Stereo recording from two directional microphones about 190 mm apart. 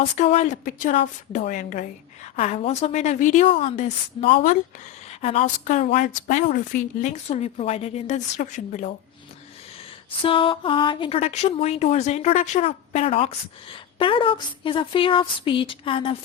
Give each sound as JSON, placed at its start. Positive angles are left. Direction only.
{"t": 0.0, "sound": "a woman's voice", "side_deg": 35}
{"t": 2.3, "sound": "a woman's voice", "side_deg": 35}
{"t": 5.2, "sound": "a woman's voice", "side_deg": 30}
{"t": 10.2, "sound": "speech", "side_deg": 30}